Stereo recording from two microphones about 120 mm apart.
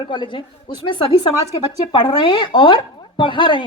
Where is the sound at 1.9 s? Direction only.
40° left (ahead or behind).